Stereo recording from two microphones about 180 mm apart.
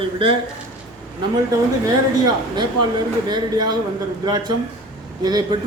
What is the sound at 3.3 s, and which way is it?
A man's voice, 25° right (ahead or behind).